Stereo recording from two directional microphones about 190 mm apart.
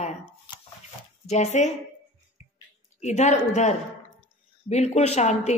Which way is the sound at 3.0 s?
35° left (ahead or behind).